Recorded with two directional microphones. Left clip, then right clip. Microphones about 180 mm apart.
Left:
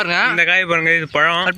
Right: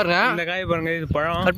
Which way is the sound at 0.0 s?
90° right.